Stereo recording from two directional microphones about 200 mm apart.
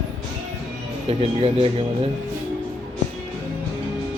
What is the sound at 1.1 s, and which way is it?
Speech, 30° right (ahead or behind).